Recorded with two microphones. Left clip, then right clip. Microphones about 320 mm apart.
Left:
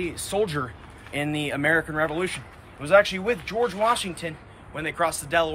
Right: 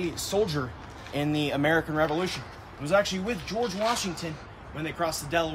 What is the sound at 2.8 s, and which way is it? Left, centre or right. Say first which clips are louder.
Speech: left 6 dB; centre.